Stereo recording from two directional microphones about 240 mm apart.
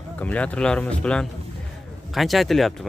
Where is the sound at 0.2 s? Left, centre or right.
Centre.